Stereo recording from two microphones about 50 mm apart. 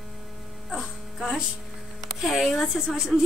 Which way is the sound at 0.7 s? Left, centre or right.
Centre.